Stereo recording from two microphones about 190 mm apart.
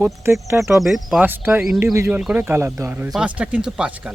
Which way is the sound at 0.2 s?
15° right (ahead or behind).